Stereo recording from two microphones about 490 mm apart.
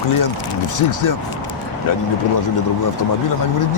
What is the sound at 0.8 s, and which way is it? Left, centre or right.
Speech, left.